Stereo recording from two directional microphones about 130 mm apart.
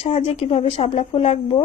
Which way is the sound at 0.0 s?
50° left (ahead or behind).